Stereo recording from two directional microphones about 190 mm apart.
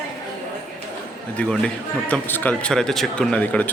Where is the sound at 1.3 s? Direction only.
5° left (ahead or behind).